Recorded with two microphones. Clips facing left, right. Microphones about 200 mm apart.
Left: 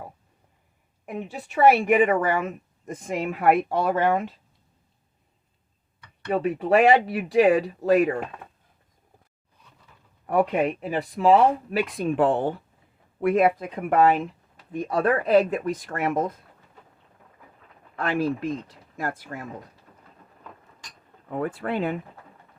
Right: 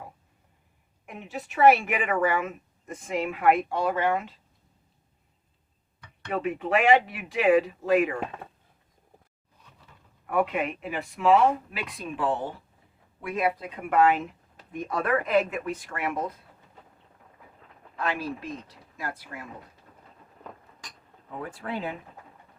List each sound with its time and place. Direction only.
2.0 s speech: 35° left (ahead or behind)
6.2 s speech: 35° left (ahead or behind)
10.2 s speech: 35° left (ahead or behind)
11.9 s speech: 55° left (ahead or behind)
14.7 s speech: 30° left (ahead or behind)
17.9 s speech: 55° left (ahead or behind)
21.2 s speech: 65° left (ahead or behind)